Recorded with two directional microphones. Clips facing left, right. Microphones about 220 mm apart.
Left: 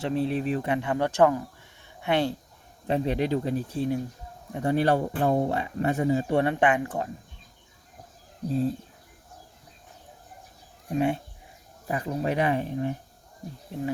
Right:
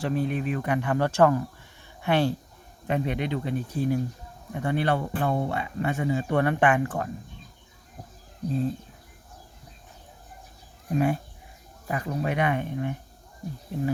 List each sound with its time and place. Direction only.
0.0 s speech: 30° left (ahead or behind)
2.8 s speech: 35° left (ahead or behind)
4.5 s speech: 35° left (ahead or behind); by 7.1 s 20° left (ahead or behind)
10.8 s speech: 25° left (ahead or behind)
13.7 s speech: 25° left (ahead or behind)